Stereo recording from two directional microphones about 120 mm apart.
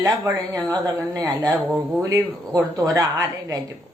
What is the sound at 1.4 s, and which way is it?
Speech, 5° right (ahead or behind).